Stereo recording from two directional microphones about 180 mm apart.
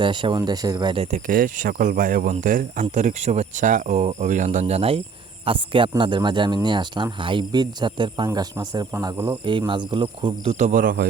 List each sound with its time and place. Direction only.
0.0 s speech: 25° right (ahead or behind)
1.3 s speech: 50° right (ahead or behind); by 9.4 s 10° right (ahead or behind)
9.4 s speech: 25° right (ahead or behind); by 11.1 s 55° right (ahead or behind)